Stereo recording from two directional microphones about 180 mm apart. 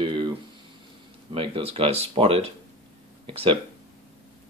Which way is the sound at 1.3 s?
30° right (ahead or behind).